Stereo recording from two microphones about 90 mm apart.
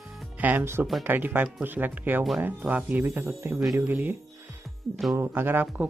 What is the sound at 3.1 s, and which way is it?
Speech, 30° right (ahead or behind).